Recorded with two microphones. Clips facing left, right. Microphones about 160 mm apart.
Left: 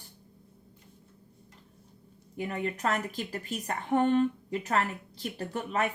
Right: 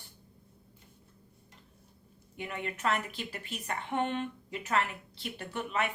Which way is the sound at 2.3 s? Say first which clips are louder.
Left 5 dB; 40° left (ahead or behind).